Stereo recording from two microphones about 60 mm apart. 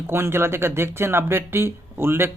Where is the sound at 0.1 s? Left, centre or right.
Right.